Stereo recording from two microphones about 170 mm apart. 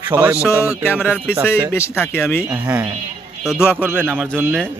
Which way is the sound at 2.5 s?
10° right (ahead or behind).